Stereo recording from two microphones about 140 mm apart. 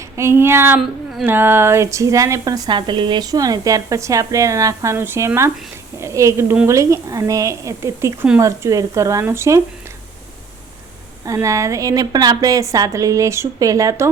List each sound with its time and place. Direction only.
0.2 s female singing: 20° right (ahead or behind)
0.8 s a sound: centre (ahead or behind)
1.3 s a woman's voice: 15° right (ahead or behind)
11.3 s a woman's voice: 20° right (ahead or behind)